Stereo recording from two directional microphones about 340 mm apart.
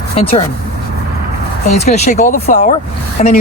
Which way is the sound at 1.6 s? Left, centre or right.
Centre.